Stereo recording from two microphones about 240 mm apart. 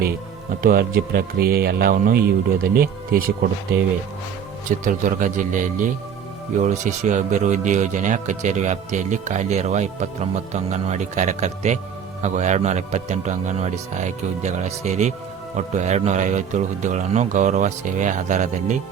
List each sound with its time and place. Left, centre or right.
0.6 s a man's voice: right
4.8 s a man's voice: right